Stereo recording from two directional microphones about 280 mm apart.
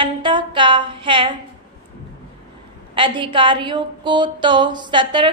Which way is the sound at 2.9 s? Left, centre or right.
Centre.